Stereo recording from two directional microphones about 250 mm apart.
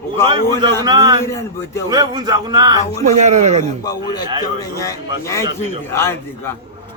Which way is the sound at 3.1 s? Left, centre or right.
Right.